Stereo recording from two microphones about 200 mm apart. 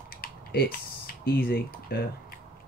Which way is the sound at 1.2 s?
50° left (ahead or behind).